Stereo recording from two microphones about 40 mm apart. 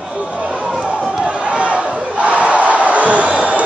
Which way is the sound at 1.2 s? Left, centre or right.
Right.